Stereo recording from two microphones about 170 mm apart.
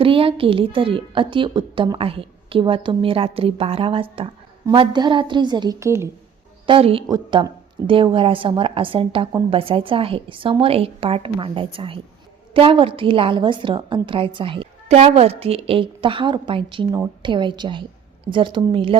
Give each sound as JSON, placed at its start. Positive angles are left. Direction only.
{"t": 0.0, "sound": "a woman's voice", "side_deg": -35}
{"t": 6.7, "sound": "a woman's voice", "side_deg": -35}